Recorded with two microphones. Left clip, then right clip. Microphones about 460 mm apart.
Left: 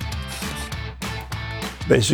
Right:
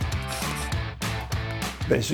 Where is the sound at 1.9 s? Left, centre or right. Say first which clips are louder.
Left 7 dB; left.